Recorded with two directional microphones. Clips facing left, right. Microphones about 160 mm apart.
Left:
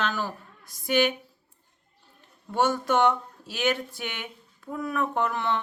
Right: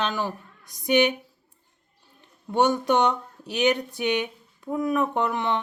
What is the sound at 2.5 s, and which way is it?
Speech, 20° right (ahead or behind).